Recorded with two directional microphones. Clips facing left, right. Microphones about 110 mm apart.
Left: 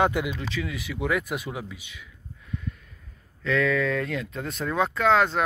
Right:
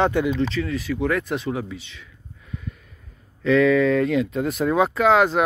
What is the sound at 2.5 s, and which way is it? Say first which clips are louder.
Snort: even; centre (ahead or behind).